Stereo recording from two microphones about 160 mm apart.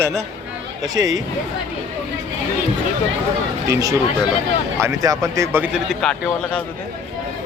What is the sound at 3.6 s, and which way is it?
A man's voice, 20° right (ahead or behind).